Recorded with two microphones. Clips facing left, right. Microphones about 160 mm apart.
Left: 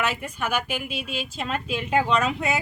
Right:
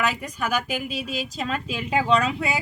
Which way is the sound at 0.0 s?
40° right (ahead or behind).